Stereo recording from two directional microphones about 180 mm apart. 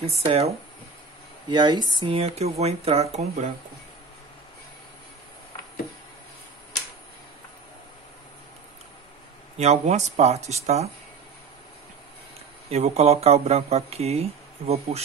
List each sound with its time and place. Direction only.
0.0 s speech: 35° right (ahead or behind)
1.5 s speech: 25° right (ahead or behind)
9.6 s speech: 40° right (ahead or behind)
12.6 s speech: 35° right (ahead or behind)